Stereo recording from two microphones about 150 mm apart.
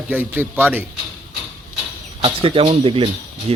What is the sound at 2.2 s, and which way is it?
Speech, 35° right (ahead or behind).